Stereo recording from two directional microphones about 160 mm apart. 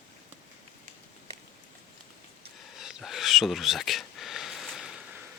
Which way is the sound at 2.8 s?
Centre (ahead or behind).